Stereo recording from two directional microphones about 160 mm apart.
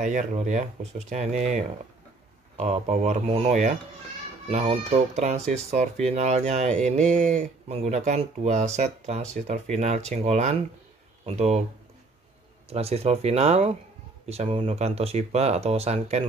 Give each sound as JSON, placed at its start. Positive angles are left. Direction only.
{"t": 0.0, "sound": "speech", "side_deg": -50}
{"t": 12.6, "sound": "speech", "side_deg": -40}